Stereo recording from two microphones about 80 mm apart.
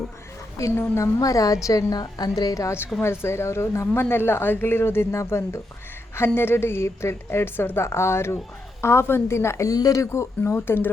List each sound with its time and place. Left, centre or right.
0.8 s a woman's voice: left
3.0 s a woman's voice: left